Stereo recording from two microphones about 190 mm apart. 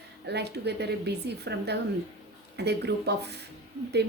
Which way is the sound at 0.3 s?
60° right (ahead or behind).